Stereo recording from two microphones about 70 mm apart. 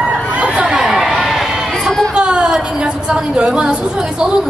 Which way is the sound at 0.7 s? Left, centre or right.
Centre.